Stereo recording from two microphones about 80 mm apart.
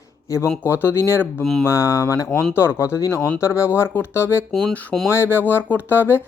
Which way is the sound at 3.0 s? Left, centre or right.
Left.